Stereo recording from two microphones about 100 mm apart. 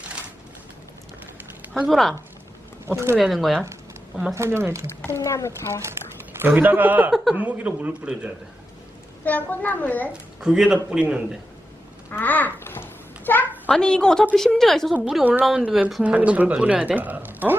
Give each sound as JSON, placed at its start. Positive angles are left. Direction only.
{"t": 1.9, "sound": "a woman's voice", "side_deg": 0}
{"t": 2.8, "sound": "speech", "side_deg": -25}
{"t": 3.2, "sound": "a woman's voice", "side_deg": 0}
{"t": 4.4, "sound": "speech", "side_deg": -25}
{"t": 4.9, "sound": "speech", "side_deg": 25}
{"t": 6.4, "sound": "a woman's voice", "side_deg": -20}
{"t": 9.2, "sound": "a child's voice", "side_deg": 15}
{"t": 10.1, "sound": "a woman's voice", "side_deg": -5}
{"t": 12.1, "sound": "babbling", "side_deg": 15}
{"t": 13.7, "sound": "a child's voice", "side_deg": 5}
{"t": 15.2, "sound": "a woman's voice", "side_deg": -15}
{"t": 15.4, "sound": "a woman's voice", "side_deg": -5}